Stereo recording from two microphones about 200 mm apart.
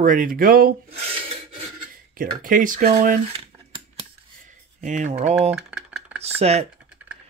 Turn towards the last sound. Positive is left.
turn(degrees=-30)  # may be behind; listen again after turning